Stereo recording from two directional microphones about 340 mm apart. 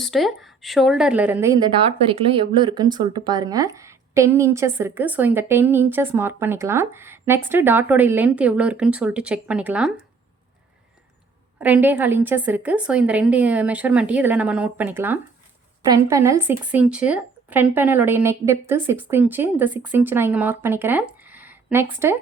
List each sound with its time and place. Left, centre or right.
0.0 s a woman's voice: centre
11.6 s a woman's voice: centre